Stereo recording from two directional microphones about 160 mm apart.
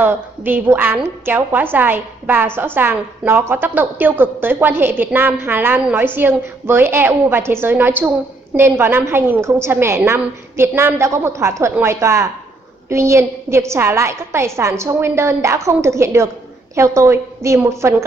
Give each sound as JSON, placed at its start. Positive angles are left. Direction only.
{"t": 0.0, "sound": "a woman's voice", "side_deg": -15}